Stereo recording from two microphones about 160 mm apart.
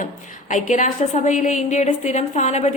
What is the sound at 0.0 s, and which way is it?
A woman's voice, 50° left (ahead or behind).